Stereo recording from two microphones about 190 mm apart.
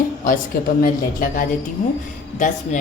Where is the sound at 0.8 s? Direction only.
45° left (ahead or behind).